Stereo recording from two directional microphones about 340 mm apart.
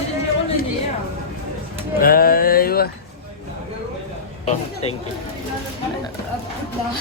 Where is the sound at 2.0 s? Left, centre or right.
Left.